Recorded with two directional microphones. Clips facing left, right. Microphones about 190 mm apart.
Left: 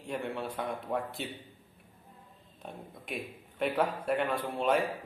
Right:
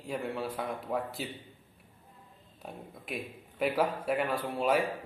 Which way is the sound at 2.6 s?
5° right (ahead or behind).